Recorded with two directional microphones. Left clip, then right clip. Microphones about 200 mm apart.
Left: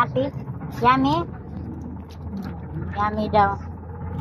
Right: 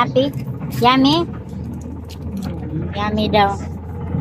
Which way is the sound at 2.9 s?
5° right (ahead or behind).